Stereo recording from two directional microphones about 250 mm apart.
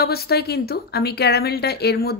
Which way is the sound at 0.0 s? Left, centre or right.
Left.